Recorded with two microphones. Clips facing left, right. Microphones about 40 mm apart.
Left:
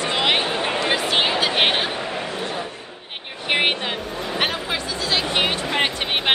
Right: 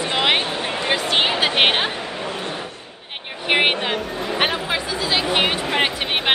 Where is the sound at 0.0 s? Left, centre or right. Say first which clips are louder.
Right 1 dB; centre.